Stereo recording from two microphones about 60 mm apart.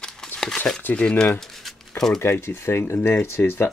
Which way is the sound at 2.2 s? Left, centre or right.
Left.